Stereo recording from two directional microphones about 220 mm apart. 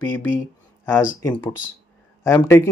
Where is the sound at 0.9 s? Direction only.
10° left (ahead or behind).